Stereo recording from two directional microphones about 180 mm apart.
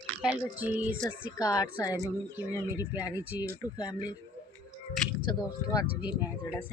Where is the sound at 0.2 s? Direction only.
5° right (ahead or behind).